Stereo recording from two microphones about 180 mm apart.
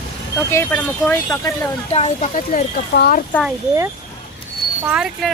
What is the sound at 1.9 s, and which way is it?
Speech, 35° left (ahead or behind).